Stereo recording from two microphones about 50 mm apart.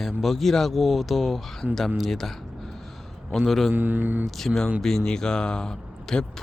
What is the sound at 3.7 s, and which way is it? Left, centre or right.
Speech, right.